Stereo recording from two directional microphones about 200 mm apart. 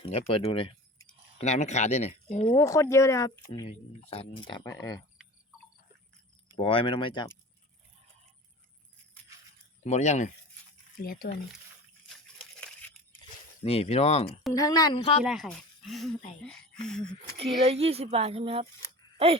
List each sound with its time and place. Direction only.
0.0 s speech: 30° left (ahead or behind)
2.6 s speech: 15° left (ahead or behind)
4.1 s speech: 25° left (ahead or behind)
6.6 s speech: 25° left (ahead or behind)
9.8 s speech: 35° left (ahead or behind)
10.9 s speech: 45° left (ahead or behind)
12.5 s a sound: 5° left (ahead or behind)
13.6 s speech: 30° left (ahead or behind)
14.5 s speech: 20° left (ahead or behind)
15.2 s speech: centre (ahead or behind)
17.3 s speech: 30° right (ahead or behind)